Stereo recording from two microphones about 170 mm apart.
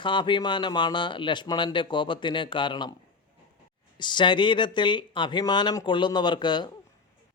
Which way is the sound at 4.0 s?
25° left (ahead or behind).